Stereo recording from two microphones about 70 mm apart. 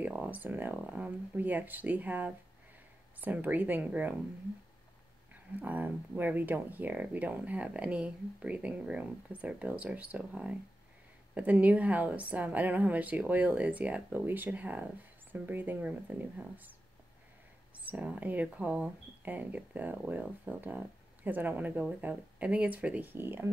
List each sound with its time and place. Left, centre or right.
0.0 s speech: right
5.3 s speech: right
17.7 s speech: right
23.1 s speech: right